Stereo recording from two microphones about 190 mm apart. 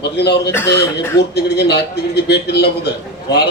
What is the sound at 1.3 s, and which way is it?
A man's voice, 60° left (ahead or behind).